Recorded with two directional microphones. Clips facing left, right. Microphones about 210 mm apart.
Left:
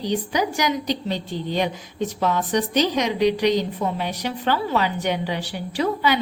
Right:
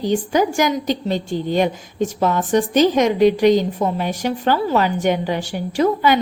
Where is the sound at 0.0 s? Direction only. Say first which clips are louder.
Right 5 dB; 45° right (ahead or behind).